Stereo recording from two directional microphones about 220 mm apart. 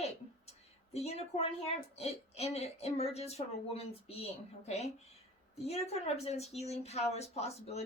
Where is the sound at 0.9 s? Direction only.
30° left (ahead or behind).